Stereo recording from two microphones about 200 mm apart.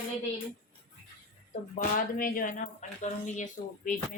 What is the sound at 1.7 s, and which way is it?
Speech, 45° left (ahead or behind).